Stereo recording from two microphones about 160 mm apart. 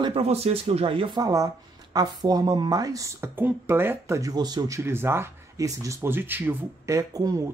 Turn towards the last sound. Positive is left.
turn(degrees=-20)  # may be behind; listen again after turning